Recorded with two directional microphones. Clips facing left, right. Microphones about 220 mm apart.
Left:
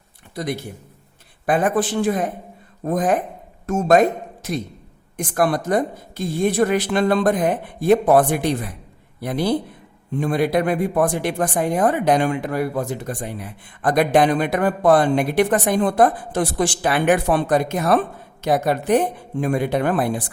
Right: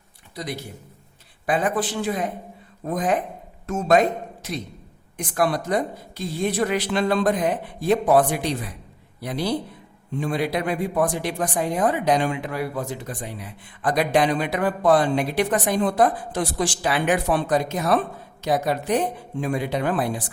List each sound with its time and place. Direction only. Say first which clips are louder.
0.3 s speech: left 5 dB; 50° left (ahead or behind)